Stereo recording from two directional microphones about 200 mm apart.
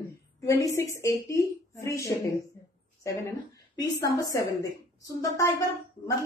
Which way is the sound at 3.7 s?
15° left (ahead or behind).